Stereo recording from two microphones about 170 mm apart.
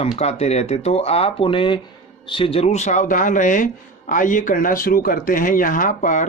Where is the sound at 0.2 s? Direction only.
40° left (ahead or behind).